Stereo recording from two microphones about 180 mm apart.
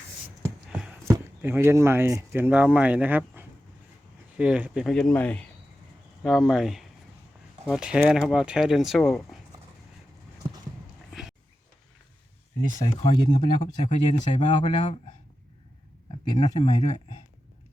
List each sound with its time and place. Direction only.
0.4 s a sound: 5° right (ahead or behind)
1.1 s speech: 10° right (ahead or behind)
11.1 s a sound: centre (ahead or behind)
12.7 s speech: 25° left (ahead or behind)
13.8 s speech: 45° left (ahead or behind)
16.3 s speech: 25° left (ahead or behind)